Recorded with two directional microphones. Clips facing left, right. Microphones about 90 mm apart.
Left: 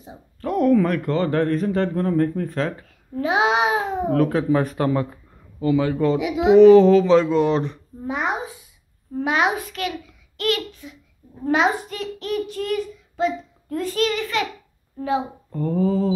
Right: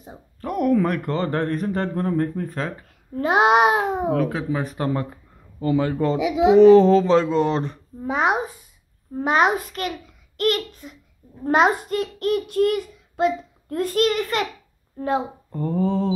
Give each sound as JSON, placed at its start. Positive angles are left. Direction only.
{"t": 0.4, "sound": "speech", "side_deg": -15}
{"t": 3.2, "sound": "a child's voice", "side_deg": -50}
{"t": 4.1, "sound": "speech", "side_deg": -5}
{"t": 5.6, "sound": "a child's voice", "side_deg": -35}
{"t": 9.2, "sound": "a child's voice", "side_deg": -40}
{"t": 15.7, "sound": "speech", "side_deg": -30}